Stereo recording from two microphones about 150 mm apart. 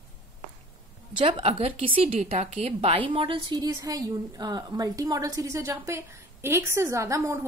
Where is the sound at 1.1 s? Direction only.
35° right (ahead or behind).